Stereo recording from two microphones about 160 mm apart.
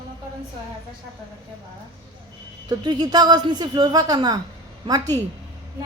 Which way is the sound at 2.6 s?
25° right (ahead or behind).